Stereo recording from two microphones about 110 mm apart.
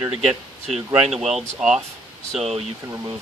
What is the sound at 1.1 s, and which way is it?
Speech, 5° right (ahead or behind).